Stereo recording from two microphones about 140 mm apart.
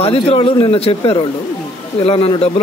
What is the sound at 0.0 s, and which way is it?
A man's voice, 45° left (ahead or behind).